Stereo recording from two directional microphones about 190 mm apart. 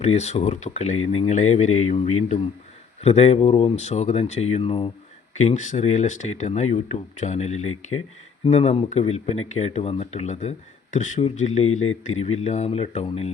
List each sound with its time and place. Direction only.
0.0 s speech: 35° left (ahead or behind)